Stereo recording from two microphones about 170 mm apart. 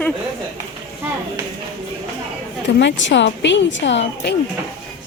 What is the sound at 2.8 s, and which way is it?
Speech, 90° left.